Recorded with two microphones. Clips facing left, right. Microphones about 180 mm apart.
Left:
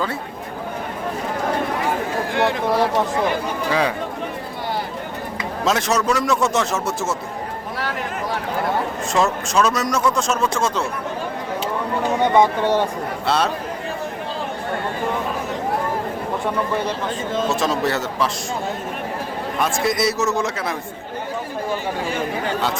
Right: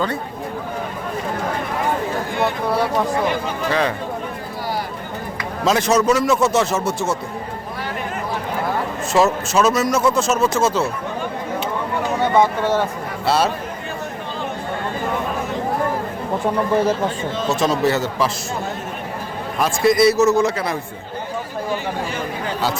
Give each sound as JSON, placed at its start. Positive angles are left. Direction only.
{"t": 3.7, "sound": "speech", "side_deg": 10}
{"t": 5.6, "sound": "speech", "side_deg": 0}
{"t": 9.1, "sound": "speech", "side_deg": -5}
{"t": 12.2, "sound": "speech", "side_deg": 15}
{"t": 13.2, "sound": "speech", "side_deg": -5}
{"t": 17.5, "sound": "speech", "side_deg": 0}
{"t": 19.5, "sound": "speech", "side_deg": 0}